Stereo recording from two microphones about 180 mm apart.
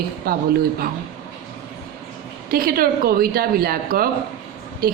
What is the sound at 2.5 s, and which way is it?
Speech, 55° right (ahead or behind).